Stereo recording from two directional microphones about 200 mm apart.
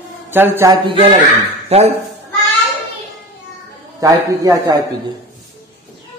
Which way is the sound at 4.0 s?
15° right (ahead or behind).